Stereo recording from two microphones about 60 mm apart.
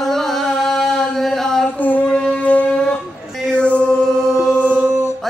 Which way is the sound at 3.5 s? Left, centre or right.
Left.